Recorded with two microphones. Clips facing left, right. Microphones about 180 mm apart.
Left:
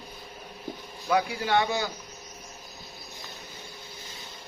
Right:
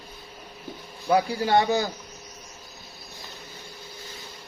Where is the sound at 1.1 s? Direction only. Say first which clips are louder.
Right 4 dB; 35° right (ahead or behind).